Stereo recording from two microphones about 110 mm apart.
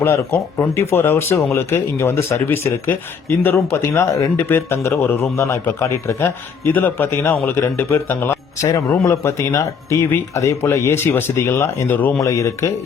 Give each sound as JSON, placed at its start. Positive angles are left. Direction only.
{"t": 0.0, "sound": "speech", "side_deg": 20}
{"t": 12.2, "sound": "speech", "side_deg": 30}